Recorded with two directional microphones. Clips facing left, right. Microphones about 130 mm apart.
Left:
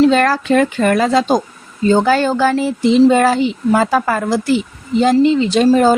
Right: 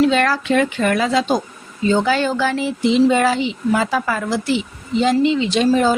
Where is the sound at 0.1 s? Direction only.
40° left (ahead or behind).